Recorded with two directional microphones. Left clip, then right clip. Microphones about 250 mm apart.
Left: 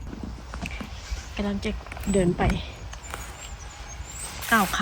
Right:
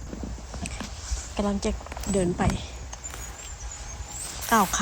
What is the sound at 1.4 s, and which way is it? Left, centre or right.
Speech, centre.